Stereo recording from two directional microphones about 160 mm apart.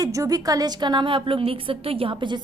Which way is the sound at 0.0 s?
20° right (ahead or behind).